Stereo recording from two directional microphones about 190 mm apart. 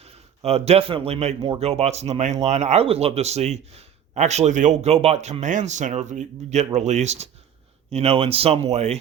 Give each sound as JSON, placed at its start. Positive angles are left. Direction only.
{"t": 0.0, "sound": "a man's voice", "side_deg": -35}